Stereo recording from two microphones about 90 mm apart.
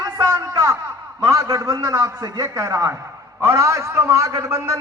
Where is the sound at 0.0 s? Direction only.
45° right (ahead or behind).